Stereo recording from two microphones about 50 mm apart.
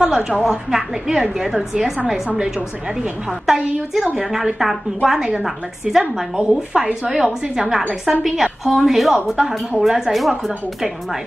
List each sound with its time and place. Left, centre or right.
0.0 s a woman's voice: centre
3.4 s a woman's voice: centre